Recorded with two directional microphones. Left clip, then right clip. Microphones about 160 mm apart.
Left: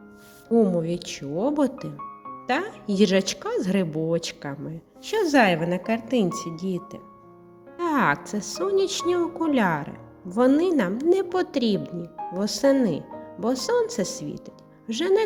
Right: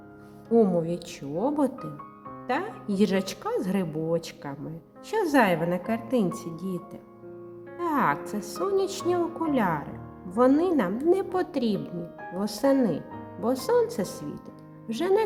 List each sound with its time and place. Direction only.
0.5 s a woman's voice: 5° left (ahead or behind)